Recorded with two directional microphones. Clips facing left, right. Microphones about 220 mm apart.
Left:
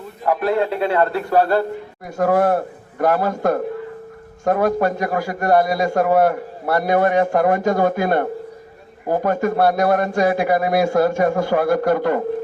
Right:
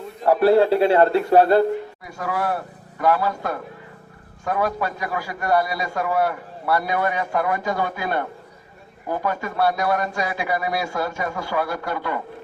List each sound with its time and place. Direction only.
0.3 s a man's voice: 35° right (ahead or behind)
2.0 s a man's voice: 50° left (ahead or behind)